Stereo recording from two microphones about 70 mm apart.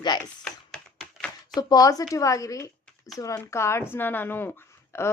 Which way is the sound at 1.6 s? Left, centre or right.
Left.